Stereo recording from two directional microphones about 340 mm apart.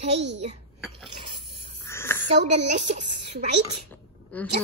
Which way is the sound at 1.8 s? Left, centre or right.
Centre.